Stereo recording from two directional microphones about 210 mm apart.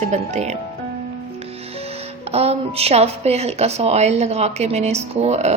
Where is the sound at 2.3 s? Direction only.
30° right (ahead or behind).